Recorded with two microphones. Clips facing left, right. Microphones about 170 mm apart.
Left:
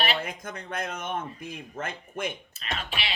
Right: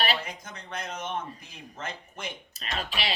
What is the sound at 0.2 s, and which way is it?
A man's voice, 55° left (ahead or behind).